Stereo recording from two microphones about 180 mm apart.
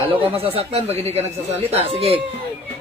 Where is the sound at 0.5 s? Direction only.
35° right (ahead or behind).